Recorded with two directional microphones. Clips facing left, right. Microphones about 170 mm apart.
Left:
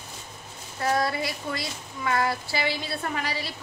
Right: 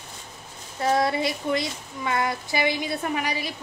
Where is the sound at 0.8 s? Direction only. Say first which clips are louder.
Right 3 dB; 25° right (ahead or behind).